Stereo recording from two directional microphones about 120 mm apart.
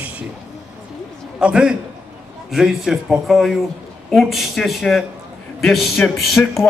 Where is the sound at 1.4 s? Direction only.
5° right (ahead or behind).